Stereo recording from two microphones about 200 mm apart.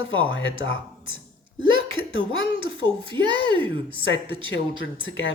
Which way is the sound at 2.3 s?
90° left.